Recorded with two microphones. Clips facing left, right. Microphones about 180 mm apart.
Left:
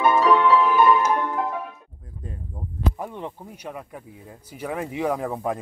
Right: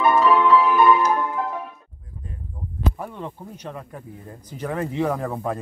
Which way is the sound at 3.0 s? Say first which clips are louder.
Even; 15° left (ahead or behind).